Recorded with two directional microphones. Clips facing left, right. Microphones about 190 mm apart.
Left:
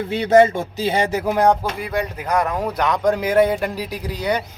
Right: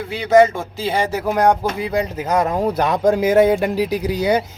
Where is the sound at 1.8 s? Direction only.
25° right (ahead or behind).